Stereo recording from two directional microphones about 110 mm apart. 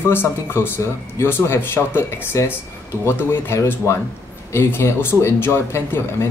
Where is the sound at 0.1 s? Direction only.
20° left (ahead or behind).